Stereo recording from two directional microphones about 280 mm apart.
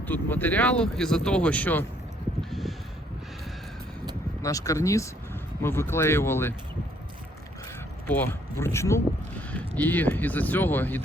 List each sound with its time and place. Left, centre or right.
0.1 s speech: centre
2.5 s a sound: centre
4.4 s speech: centre
8.0 s speech: centre